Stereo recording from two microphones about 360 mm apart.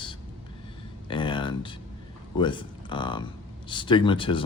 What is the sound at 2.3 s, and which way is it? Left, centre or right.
Speech, centre.